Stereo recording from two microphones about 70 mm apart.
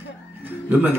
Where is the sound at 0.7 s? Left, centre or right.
Right.